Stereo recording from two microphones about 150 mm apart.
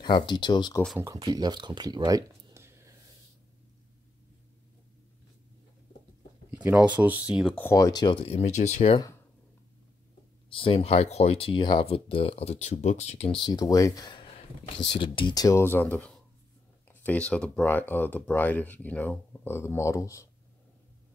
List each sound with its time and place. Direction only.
0.0 s speech: 30° left (ahead or behind)
0.9 s speech: 15° right (ahead or behind)
1.2 s speech: 25° right (ahead or behind)
6.6 s speech: 10° right (ahead or behind)
7.5 s speech: 20° left (ahead or behind); by 8.9 s 50° left (ahead or behind)
10.5 s speech: 35° left (ahead or behind); by 20.2 s 20° left (ahead or behind)